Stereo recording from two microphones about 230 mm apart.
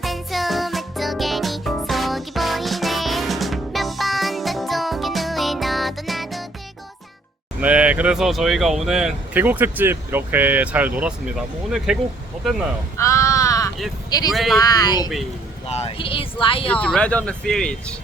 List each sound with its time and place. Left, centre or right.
0.0 s music for children: centre
7.6 s speech: centre
13.0 s a sound: centre
14.1 s speech: centre
14.3 s speech: centre
14.6 s speech: centre
16.7 s speech: centre